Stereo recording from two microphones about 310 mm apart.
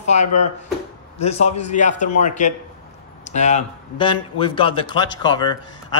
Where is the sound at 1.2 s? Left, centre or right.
Centre.